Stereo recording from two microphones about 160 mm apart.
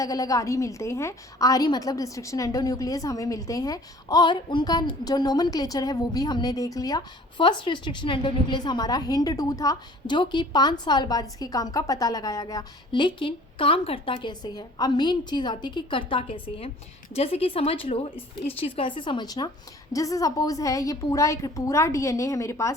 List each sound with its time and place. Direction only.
0.0 s a woman's voice: 20° left (ahead or behind)